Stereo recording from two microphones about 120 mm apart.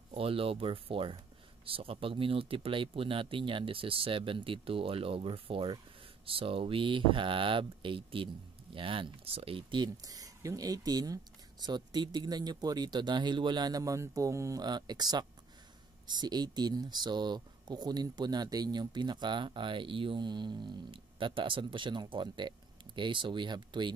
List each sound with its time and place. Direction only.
0.1 s speech: 50° right (ahead or behind)
10.0 s speech: 30° right (ahead or behind)